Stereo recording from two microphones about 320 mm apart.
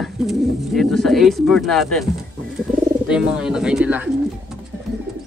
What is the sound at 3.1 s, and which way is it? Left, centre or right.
Speech, centre.